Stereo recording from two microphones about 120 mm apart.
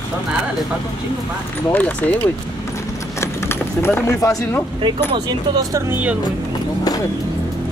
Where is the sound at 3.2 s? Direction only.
20° left (ahead or behind).